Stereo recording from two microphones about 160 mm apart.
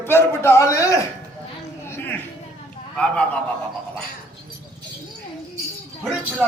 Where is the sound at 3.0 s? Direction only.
5° left (ahead or behind).